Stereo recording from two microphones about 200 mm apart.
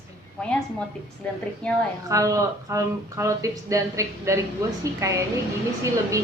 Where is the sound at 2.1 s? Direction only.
15° right (ahead or behind).